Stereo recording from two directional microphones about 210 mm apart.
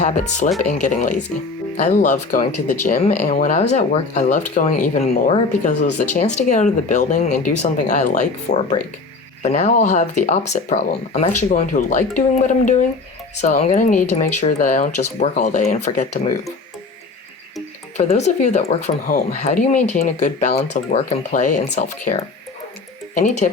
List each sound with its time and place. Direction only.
0.0 s speech: 35° left (ahead or behind)
17.9 s speech: 35° left (ahead or behind)
23.1 s speech: 35° left (ahead or behind)